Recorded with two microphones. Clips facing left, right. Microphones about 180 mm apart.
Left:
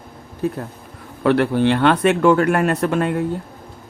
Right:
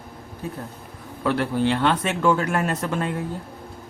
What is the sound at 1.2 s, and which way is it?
Speech, 70° left (ahead or behind).